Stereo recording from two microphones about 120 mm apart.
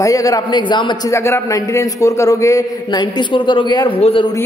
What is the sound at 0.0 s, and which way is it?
A man's voice, 30° left (ahead or behind).